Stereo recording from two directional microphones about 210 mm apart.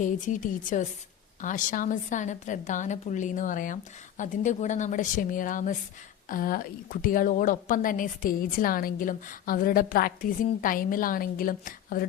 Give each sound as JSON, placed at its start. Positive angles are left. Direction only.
{"t": 0.0, "sound": "a woman's voice", "side_deg": 35}